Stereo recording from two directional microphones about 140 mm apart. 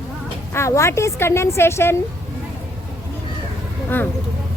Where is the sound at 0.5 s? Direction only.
20° left (ahead or behind).